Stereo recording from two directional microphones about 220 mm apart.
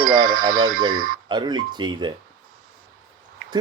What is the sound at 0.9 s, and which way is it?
Speech, 40° right (ahead or behind).